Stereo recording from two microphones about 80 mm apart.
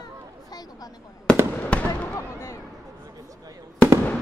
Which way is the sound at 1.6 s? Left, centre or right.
Centre.